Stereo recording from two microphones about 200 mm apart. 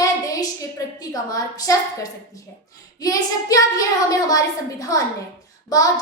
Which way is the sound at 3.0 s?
20° left (ahead or behind).